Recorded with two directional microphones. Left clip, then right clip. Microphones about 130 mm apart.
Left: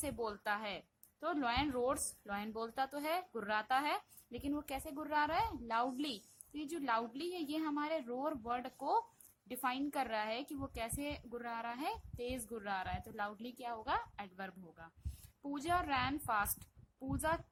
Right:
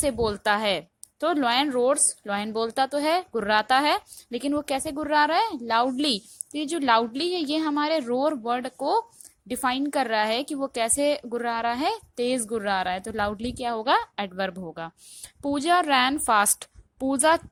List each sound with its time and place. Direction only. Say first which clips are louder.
0.0 s a woman's voice: right 16 dB; 40° right (ahead or behind); by 14.9 s 55° right (ahead or behind)
15.4 s a woman's voice: right 15 dB; 40° right (ahead or behind)